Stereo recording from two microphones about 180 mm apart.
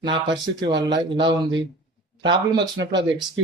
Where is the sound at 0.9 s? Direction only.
25° right (ahead or behind).